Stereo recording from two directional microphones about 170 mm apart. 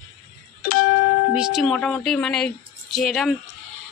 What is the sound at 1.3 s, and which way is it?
A woman's voice, 5° right (ahead or behind).